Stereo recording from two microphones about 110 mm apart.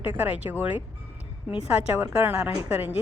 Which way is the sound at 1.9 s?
20° right (ahead or behind).